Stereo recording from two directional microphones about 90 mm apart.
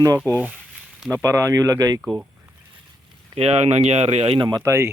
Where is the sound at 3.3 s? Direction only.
90° right.